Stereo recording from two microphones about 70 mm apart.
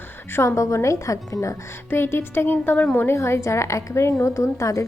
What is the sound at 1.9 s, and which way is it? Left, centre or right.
A woman's voice, left.